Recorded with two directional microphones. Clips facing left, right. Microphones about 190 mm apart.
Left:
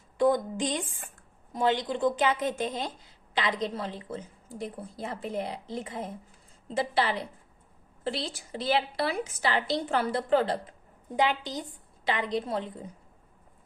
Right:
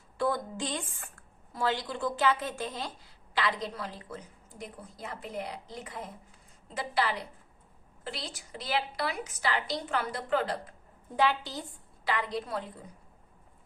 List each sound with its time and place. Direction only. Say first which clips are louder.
0.2 s a woman's voice: left 6 dB; 20° left (ahead or behind)